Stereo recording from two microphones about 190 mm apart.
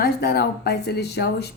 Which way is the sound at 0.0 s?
60° left (ahead or behind).